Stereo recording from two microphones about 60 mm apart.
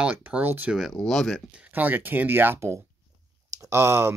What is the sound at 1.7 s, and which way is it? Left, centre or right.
Speech, right.